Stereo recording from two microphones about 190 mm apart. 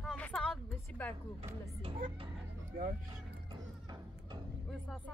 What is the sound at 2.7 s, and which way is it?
Speech, 50° right (ahead or behind).